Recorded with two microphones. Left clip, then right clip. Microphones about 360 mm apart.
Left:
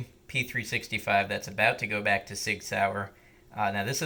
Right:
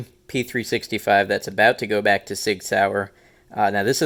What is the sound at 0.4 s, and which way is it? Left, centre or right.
Speech, right.